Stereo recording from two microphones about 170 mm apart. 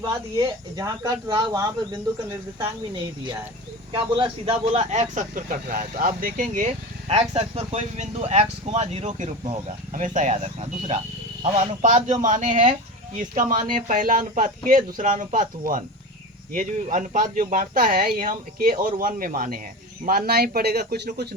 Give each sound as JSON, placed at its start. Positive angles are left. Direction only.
{"t": 0.1, "sound": "speech", "side_deg": -20}
{"t": 3.9, "sound": "speech", "side_deg": -30}